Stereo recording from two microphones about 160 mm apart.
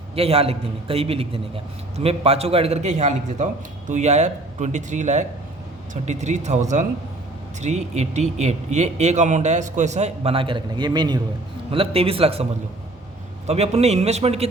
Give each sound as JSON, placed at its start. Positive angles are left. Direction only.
{"t": 0.2, "sound": "a man's voice", "side_deg": -40}
{"t": 11.7, "sound": "a man's voice", "side_deg": -35}
{"t": 13.5, "sound": "a man's voice", "side_deg": -40}